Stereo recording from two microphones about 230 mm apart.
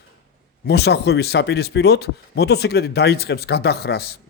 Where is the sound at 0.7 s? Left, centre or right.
Left.